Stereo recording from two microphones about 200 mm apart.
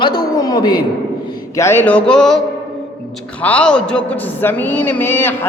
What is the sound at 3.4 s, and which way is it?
Speech, 5° left (ahead or behind).